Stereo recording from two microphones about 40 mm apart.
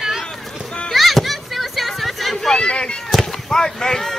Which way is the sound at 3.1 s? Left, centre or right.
Centre.